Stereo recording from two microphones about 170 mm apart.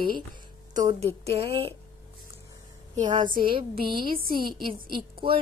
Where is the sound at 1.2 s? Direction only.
35° right (ahead or behind).